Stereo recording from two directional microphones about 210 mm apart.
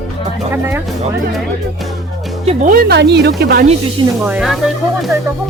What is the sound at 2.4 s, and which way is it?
Speech, 40° right (ahead or behind).